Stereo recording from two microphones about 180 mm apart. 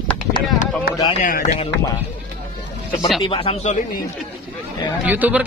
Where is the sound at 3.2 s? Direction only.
30° left (ahead or behind).